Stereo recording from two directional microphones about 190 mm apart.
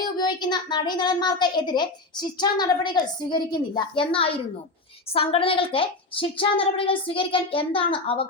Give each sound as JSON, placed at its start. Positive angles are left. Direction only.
{"t": 0.0, "sound": "a woman's voice", "side_deg": 20}